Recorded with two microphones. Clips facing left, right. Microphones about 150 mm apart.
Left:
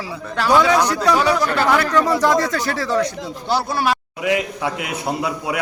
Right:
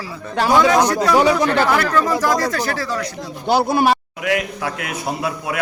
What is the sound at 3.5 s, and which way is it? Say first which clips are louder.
Speech: right 5 dB; 55° right (ahead or behind).